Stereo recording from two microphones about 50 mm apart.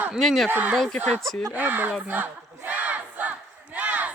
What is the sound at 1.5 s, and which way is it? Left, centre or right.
Speech, right.